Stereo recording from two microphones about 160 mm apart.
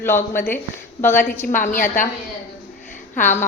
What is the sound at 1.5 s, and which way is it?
Speech, 55° left (ahead or behind).